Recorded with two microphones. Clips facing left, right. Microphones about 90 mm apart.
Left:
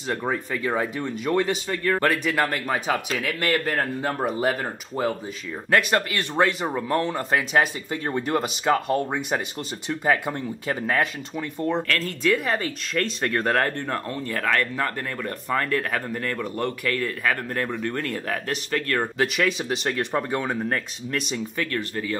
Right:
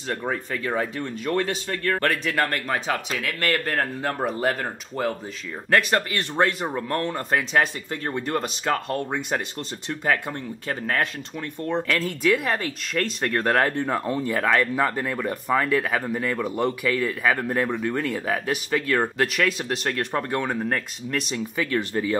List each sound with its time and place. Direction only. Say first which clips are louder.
0.3 s speech: left 1 dB; 5° left (ahead or behind)
11.9 s speech: right 2 dB; 15° right (ahead or behind)
12.3 s speech: even; centre (ahead or behind)
21.5 s speech: right 5 dB; 15° right (ahead or behind)